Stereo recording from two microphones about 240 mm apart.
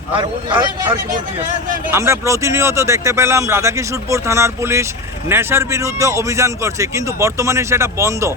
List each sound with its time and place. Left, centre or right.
0.2 s a man's voice: centre
1.9 s speech: centre